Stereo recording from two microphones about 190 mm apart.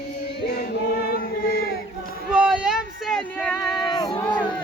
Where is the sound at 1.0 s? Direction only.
50° left (ahead or behind).